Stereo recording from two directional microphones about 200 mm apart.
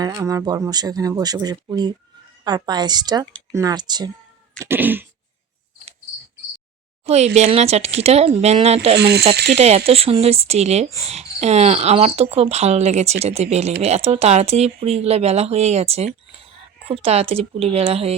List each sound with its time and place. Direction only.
0.0 s speech: 20° right (ahead or behind)
4.6 s cat: 10° right (ahead or behind)
7.0 s a sound: 35° right (ahead or behind)
7.3 s cricket: 30° right (ahead or behind)
9.0 s speech: 55° right (ahead or behind)
9.6 s cricket: 30° right (ahead or behind)